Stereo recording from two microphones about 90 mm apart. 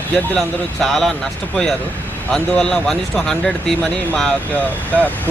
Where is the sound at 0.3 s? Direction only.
5° left (ahead or behind).